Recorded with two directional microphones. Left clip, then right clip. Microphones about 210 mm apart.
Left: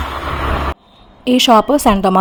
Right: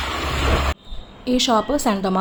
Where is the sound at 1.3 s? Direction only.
40° left (ahead or behind).